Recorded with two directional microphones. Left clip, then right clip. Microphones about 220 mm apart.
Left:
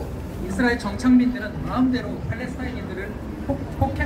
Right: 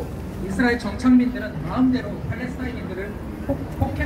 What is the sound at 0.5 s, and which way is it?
Speech, 50° left (ahead or behind).